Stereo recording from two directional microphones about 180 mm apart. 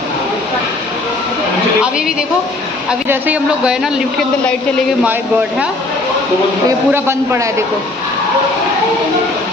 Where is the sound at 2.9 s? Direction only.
5° right (ahead or behind).